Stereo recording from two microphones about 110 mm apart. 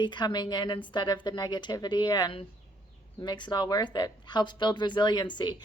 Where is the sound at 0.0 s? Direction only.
40° left (ahead or behind).